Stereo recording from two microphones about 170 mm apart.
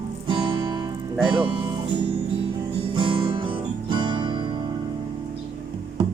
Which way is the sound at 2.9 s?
30° right (ahead or behind).